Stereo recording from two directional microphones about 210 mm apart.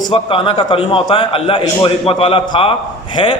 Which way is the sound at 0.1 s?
25° left (ahead or behind).